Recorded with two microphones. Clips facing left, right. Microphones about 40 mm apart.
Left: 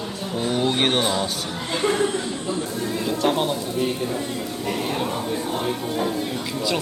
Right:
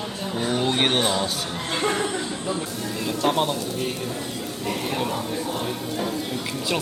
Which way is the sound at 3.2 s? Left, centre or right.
Centre.